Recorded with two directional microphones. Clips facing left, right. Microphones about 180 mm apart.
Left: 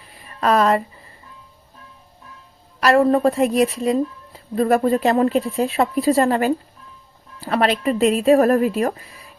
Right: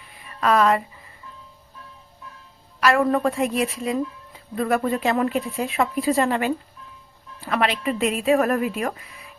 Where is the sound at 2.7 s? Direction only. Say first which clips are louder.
Left 4 dB; 35° left (ahead or behind).